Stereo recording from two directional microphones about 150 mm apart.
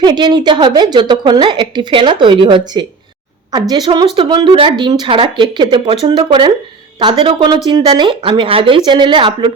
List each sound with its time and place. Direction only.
0.0 s a woman's voice: 30° right (ahead or behind)